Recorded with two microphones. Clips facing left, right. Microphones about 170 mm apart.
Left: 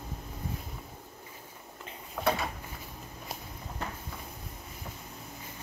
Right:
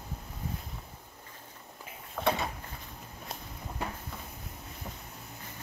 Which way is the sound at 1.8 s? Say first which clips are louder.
Even; centre (ahead or behind).